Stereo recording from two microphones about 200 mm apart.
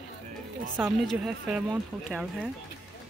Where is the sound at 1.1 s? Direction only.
5° right (ahead or behind).